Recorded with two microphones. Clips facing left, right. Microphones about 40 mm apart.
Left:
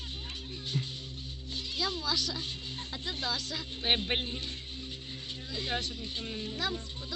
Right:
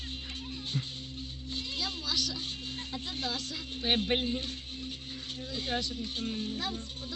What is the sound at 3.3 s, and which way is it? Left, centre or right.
Speech, right.